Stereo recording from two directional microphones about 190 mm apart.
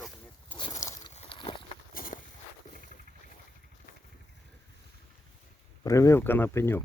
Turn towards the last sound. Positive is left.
turn(degrees=10)  # may be behind; listen again after turning